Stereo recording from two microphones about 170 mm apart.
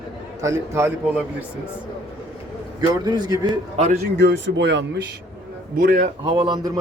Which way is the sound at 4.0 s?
85° right.